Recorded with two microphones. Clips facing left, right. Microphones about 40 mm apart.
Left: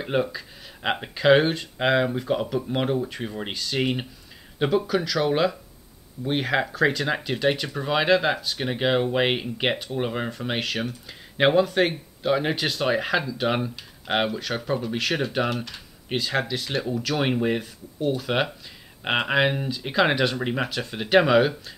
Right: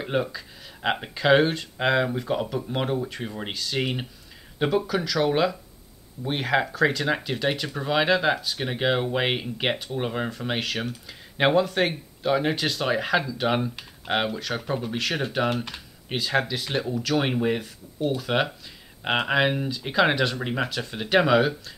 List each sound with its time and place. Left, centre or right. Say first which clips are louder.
0.0 s speech: left 2 dB; centre
15.5 s speech: right 1 dB; right
16.1 s speech: even; centre